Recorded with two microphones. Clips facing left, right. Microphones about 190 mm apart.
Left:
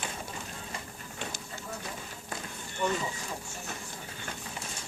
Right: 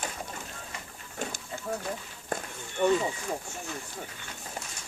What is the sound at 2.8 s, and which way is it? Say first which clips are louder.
Speech: right 6 dB; 55° right (ahead or behind).